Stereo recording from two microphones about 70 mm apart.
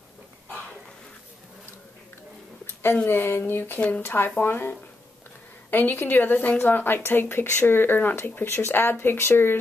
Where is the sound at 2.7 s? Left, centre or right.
Left.